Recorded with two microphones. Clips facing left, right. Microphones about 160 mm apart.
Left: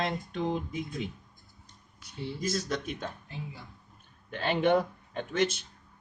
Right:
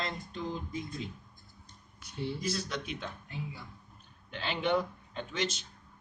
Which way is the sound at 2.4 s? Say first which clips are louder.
Left 4 dB; 45° left (ahead or behind).